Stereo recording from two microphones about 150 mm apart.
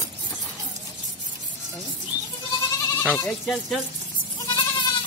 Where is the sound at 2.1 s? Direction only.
10° right (ahead or behind).